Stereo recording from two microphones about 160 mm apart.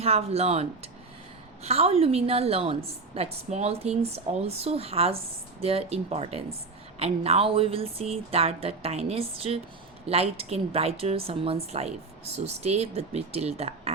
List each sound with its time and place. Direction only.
0.0 s a woman's voice: 40° right (ahead or behind)